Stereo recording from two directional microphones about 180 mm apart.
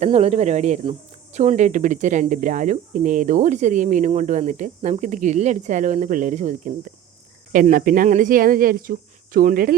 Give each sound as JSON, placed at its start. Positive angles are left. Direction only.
{"t": 0.0, "sound": "speech", "side_deg": -35}